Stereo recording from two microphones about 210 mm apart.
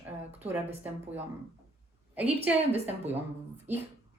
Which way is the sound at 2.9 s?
10° right (ahead or behind).